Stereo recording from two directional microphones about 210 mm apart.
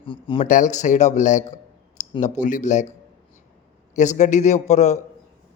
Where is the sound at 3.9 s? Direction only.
35° left (ahead or behind).